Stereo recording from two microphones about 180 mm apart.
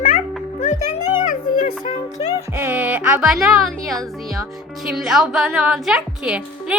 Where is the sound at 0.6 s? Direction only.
40° left (ahead or behind).